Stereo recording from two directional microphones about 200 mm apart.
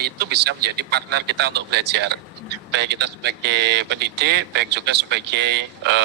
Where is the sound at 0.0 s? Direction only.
55° right (ahead or behind).